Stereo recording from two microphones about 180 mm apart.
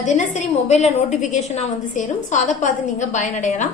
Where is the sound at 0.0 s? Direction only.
40° left (ahead or behind).